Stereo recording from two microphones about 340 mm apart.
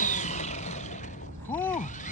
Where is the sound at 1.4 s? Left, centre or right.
Centre.